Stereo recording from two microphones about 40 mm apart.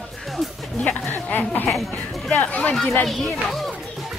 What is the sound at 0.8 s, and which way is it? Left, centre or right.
Speech, left.